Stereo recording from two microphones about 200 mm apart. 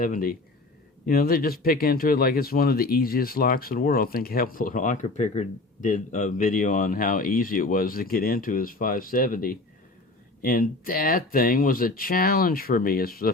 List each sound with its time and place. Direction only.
0.0 s speech: 45° left (ahead or behind)